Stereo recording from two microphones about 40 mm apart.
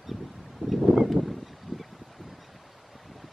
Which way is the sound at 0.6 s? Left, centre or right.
Right.